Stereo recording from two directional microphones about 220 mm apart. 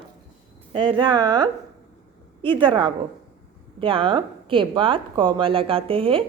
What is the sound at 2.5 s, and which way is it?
Speech, 20° right (ahead or behind).